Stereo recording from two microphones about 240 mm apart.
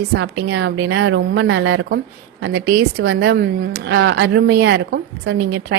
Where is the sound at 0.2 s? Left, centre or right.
Right.